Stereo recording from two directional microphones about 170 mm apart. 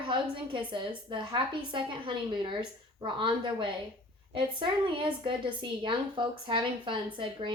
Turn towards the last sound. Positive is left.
turn(degrees=-30)  # may be behind; listen again after turning